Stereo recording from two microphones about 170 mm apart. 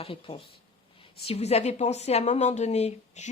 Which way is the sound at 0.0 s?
30° left (ahead or behind).